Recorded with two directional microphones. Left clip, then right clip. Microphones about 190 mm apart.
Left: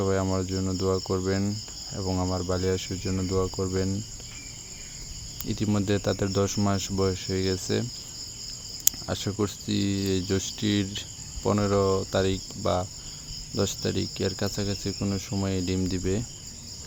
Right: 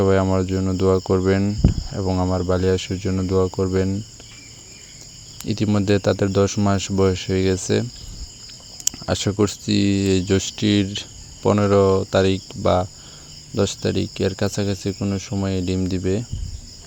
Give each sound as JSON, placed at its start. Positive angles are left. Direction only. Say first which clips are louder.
{"t": 0.0, "sound": "speech", "louder": "right 8 dB", "side_deg": -35}
{"t": 5.4, "sound": "speech", "louder": "right 7 dB", "side_deg": -30}